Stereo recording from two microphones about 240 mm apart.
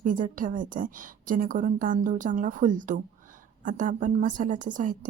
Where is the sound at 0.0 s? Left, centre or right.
Right.